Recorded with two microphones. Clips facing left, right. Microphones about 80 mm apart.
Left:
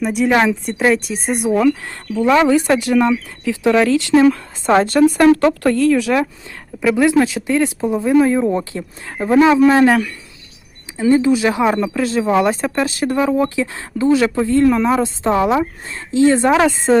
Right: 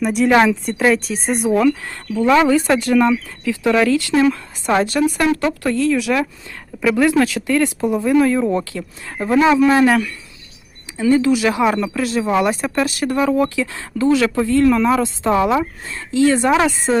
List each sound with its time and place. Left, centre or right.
0.0 s a woman's voice: centre; by 6.2 s left
6.8 s a woman's voice: centre
8.7 s speech: left
9.3 s a woman's voice: left
10.9 s a woman's voice: left